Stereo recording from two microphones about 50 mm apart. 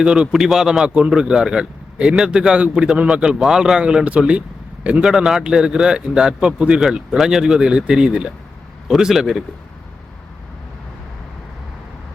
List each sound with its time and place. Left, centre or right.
0.0 s a man's voice: centre
3.8 s a man's voice: right
5.0 s a man's voice: centre
8.9 s a man's voice: centre